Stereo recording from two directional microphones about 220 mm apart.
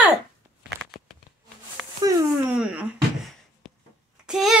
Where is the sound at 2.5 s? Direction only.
5° right (ahead or behind).